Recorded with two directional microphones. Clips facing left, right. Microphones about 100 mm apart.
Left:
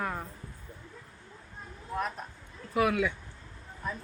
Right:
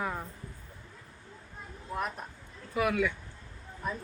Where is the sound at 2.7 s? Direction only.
5° left (ahead or behind).